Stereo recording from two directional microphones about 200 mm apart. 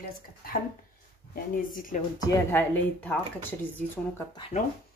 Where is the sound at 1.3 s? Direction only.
45° left (ahead or behind).